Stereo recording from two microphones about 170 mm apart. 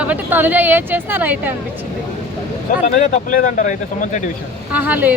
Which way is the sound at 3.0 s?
50° left (ahead or behind).